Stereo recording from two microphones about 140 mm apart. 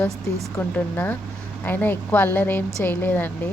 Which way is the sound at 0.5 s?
15° left (ahead or behind).